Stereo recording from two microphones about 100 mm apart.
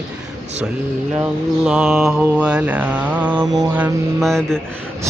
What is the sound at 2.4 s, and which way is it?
Mantra, 10° right (ahead or behind).